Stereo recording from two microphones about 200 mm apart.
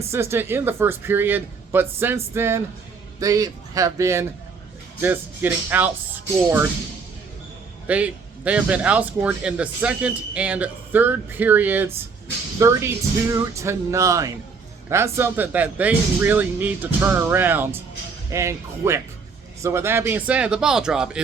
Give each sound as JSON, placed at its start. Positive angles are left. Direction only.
{"t": 0.1, "sound": "a man's voice", "side_deg": -10}
{"t": 7.9, "sound": "a man's voice", "side_deg": -5}